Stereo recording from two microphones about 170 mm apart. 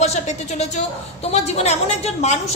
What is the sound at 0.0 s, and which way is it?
A woman's voice, 40° left (ahead or behind).